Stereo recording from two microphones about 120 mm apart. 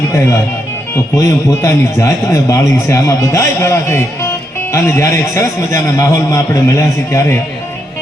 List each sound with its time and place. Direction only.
1.1 s a man's voice: 30° left (ahead or behind)